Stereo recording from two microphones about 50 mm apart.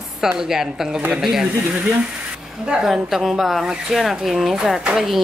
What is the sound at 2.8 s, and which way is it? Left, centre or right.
Speech, centre.